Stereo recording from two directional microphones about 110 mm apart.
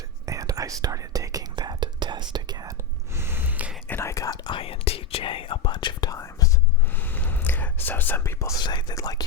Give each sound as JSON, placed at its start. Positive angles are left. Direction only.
{"t": 0.3, "sound": "whispering", "side_deg": -35}
{"t": 3.2, "sound": "gasp", "side_deg": -20}
{"t": 3.8, "sound": "speech", "side_deg": 25}
{"t": 4.5, "sound": "speech", "side_deg": 60}
{"t": 6.1, "sound": "whispering", "side_deg": 30}
{"t": 6.9, "sound": "whispering", "side_deg": 15}
{"t": 8.6, "sound": "speech", "side_deg": 45}